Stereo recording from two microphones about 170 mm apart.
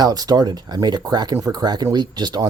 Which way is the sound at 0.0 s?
25° right (ahead or behind).